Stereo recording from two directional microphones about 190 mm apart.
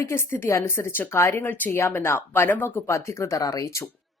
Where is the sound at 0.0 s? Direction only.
15° left (ahead or behind).